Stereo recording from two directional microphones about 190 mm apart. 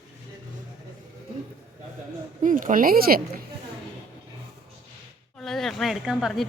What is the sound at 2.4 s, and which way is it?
Speech, 45° right (ahead or behind).